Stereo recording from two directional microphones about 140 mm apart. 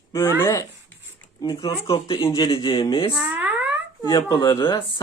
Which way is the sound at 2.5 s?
35° left (ahead or behind).